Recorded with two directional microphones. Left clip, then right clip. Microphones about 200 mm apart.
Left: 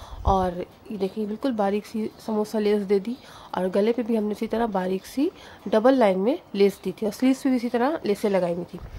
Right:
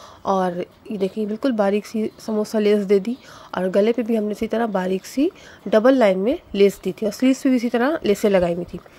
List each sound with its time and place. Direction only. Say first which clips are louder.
0.2 s a woman's voice: right 2 dB; 15° right (ahead or behind)